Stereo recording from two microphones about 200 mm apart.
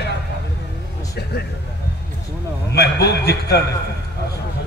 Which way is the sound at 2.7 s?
55° left (ahead or behind).